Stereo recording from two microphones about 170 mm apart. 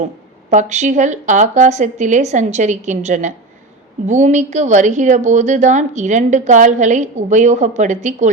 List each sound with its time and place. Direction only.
0.5 s a woman's voice: 45° right (ahead or behind)